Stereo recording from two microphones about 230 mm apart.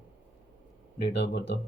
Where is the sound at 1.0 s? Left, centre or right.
Left.